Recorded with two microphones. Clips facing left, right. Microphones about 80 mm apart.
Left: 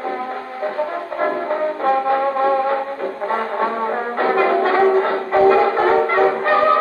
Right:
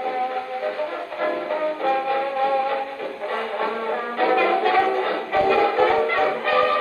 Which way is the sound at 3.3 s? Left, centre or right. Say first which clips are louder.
Left 4 dB; left.